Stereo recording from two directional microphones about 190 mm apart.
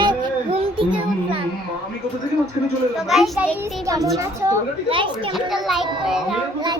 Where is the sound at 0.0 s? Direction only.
25° right (ahead or behind).